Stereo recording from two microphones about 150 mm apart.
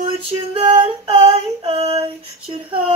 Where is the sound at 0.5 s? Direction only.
35° right (ahead or behind).